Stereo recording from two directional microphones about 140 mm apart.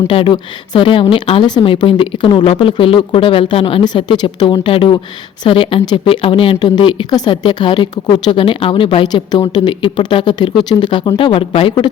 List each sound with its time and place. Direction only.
0.1 s a woman's voice: 40° left (ahead or behind)